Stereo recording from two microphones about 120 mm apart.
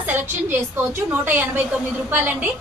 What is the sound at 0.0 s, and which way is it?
A woman's voice, 15° right (ahead or behind).